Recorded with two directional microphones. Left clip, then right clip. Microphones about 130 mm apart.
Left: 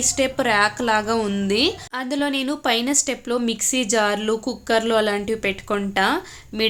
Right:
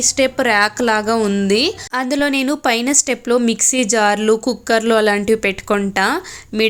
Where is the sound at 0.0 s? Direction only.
40° right (ahead or behind).